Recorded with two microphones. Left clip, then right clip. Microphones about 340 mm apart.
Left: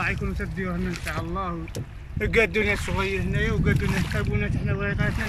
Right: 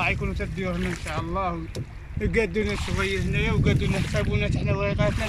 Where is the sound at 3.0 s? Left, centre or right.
Centre.